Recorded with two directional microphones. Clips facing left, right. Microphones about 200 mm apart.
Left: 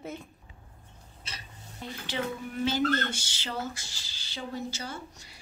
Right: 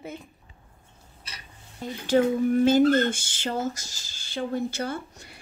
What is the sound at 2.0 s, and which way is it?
A woman's voice, 45° right (ahead or behind).